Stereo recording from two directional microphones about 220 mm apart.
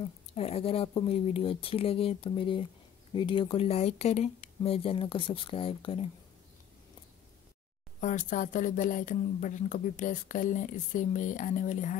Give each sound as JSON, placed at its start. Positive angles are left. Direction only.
{"t": 0.0, "sound": "speech", "side_deg": 25}
{"t": 8.0, "sound": "speech", "side_deg": 35}